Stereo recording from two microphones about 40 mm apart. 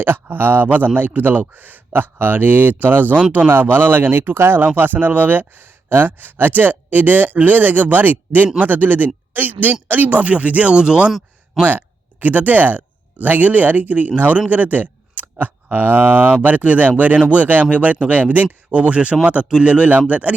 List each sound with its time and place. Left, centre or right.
0.0 s speech: right
4.6 s speech: right
11.6 s speech: centre
12.2 s speech: right